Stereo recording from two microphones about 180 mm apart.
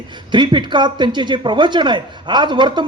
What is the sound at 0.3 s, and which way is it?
Speech, 25° right (ahead or behind).